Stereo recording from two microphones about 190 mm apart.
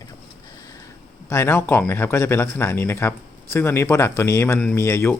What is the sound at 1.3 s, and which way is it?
Speech, 15° left (ahead or behind).